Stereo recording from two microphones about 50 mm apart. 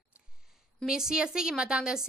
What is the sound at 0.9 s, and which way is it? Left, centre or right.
A woman's voice, centre.